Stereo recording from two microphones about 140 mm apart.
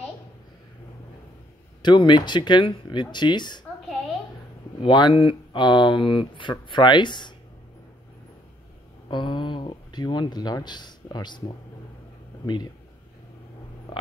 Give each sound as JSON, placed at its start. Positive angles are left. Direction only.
{"t": 1.8, "sound": "speech", "side_deg": 35}
{"t": 4.8, "sound": "speech", "side_deg": 35}
{"t": 9.1, "sound": "speech", "side_deg": 35}